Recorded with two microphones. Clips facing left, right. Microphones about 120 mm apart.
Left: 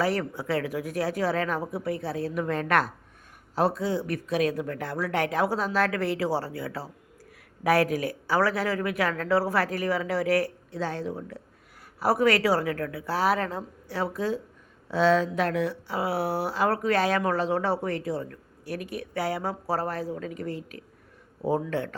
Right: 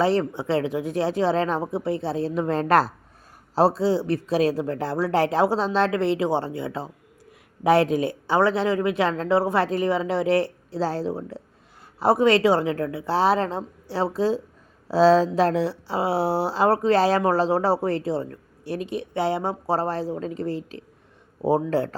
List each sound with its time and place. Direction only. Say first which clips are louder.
0.0 s speech: right 5 dB; 25° right (ahead or behind)